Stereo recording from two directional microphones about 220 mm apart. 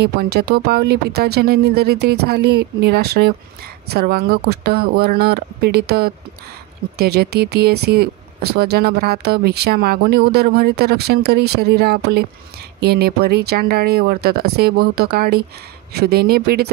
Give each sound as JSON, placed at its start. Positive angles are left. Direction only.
{"t": 0.0, "sound": "speech", "side_deg": -45}